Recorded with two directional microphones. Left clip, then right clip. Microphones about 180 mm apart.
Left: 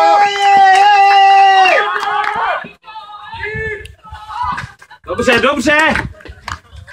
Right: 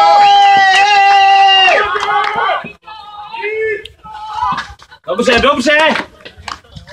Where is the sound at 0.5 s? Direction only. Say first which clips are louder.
Left 1 dB; 55° left (ahead or behind).